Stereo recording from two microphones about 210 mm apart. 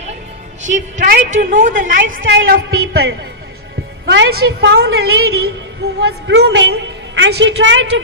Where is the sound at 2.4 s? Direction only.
45° right (ahead or behind).